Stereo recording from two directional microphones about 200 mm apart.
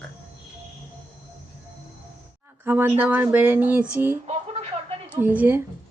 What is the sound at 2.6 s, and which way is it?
Speech, 10° right (ahead or behind).